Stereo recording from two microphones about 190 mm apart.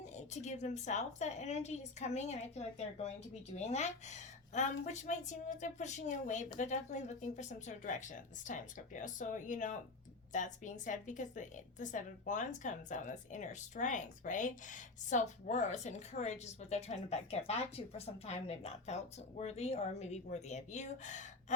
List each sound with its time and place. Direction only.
0.1 s a woman's voice: 40° left (ahead or behind)